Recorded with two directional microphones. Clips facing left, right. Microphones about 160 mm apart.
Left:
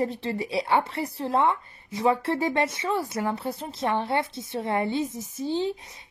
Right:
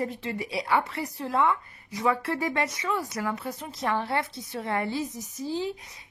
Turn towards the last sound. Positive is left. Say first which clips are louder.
# left 4 dB
turn(degrees=25)  # may be behind; listen again after turning